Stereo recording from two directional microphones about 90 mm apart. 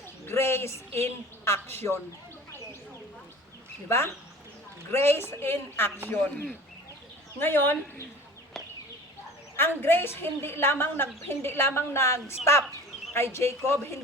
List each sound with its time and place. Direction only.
0.3 s a sound: 25° left (ahead or behind)
1.5 s a woman's voice: 25° left (ahead or behind)
3.8 s a woman's voice: 30° left (ahead or behind)
9.6 s a woman's voice: 25° left (ahead or behind)